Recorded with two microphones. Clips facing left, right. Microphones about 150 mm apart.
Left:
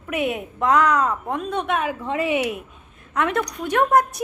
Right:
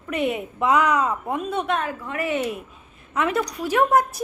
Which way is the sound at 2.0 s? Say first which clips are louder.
Left 3 dB; 20° left (ahead or behind).